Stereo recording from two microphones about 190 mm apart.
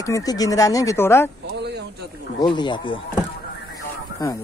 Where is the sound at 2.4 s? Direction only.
25° left (ahead or behind).